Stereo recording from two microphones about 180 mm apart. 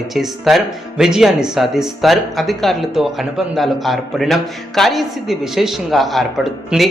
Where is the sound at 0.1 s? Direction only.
Centre (ahead or behind).